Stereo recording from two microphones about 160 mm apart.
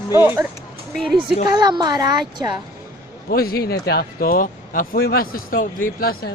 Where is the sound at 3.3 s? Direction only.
70° left (ahead or behind).